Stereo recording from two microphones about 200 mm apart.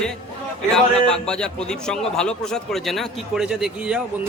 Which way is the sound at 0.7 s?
5° left (ahead or behind).